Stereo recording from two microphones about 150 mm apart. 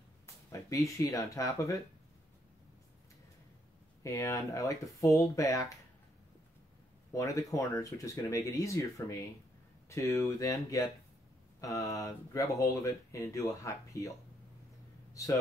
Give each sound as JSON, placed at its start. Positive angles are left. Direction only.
{"t": 0.5, "sound": "speech", "side_deg": 20}
{"t": 4.0, "sound": "speech", "side_deg": 20}
{"t": 7.1, "sound": "speech", "side_deg": 20}